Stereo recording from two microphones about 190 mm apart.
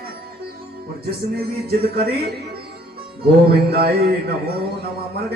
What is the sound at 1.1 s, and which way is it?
A man's voice, 55° right (ahead or behind).